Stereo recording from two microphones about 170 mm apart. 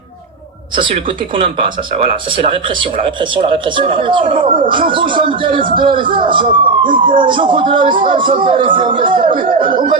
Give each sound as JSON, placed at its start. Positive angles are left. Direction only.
{"t": 1.4, "sound": "speech", "side_deg": -35}